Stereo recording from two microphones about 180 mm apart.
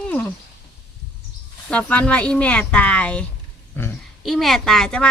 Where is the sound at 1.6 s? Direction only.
5° left (ahead or behind).